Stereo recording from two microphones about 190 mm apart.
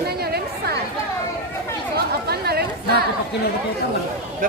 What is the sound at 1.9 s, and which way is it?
Chatter, 55° right (ahead or behind).